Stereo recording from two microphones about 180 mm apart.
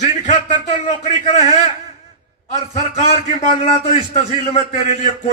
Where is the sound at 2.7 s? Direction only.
40° left (ahead or behind).